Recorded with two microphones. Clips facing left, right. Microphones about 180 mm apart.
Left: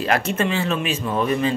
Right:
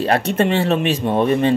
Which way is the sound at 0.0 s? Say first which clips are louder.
Right 4 dB; 35° right (ahead or behind).